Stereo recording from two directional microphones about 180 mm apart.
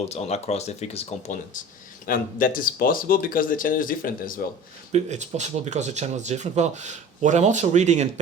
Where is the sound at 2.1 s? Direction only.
50° left (ahead or behind).